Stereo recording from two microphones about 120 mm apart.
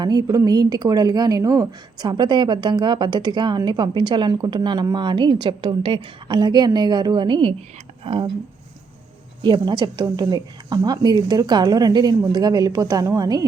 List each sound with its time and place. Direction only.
0.0 s speech: 35° right (ahead or behind)
9.4 s speech: 40° right (ahead or behind)